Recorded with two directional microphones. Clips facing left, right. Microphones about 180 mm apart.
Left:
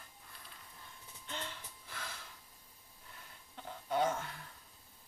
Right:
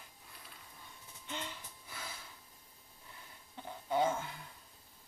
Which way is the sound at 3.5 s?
10° right (ahead or behind).